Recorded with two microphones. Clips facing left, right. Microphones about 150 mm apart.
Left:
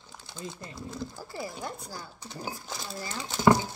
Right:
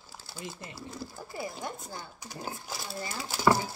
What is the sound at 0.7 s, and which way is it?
Speech, 5° right (ahead or behind).